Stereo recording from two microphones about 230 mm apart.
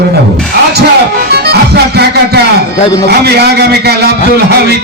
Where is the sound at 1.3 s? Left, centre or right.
Right.